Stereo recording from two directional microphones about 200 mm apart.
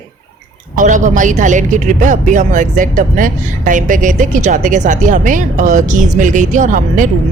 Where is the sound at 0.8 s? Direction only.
40° right (ahead or behind).